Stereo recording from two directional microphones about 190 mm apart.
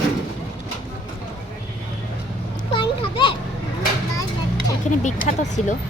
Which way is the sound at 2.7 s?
25° left (ahead or behind).